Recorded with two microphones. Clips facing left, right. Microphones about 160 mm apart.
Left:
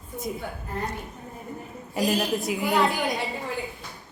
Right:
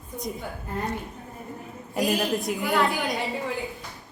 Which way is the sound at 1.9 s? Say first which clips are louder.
Even; centre (ahead or behind).